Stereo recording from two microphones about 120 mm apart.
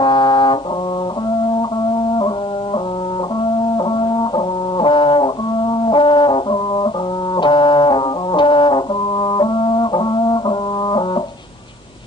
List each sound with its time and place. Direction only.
0.0 s brass instrument: 40° left (ahead or behind)
3.8 s brass instrument: 40° left (ahead or behind)